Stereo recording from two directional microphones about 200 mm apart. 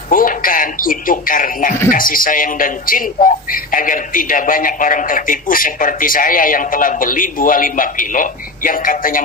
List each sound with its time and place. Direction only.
0.1 s a man's voice: 45° left (ahead or behind)